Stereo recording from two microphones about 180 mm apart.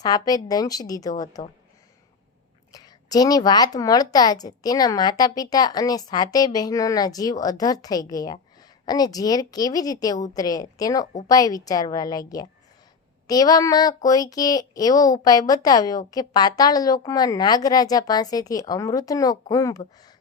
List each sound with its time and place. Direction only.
0.0 s speech: 20° left (ahead or behind)
2.7 s speech: 20° left (ahead or behind)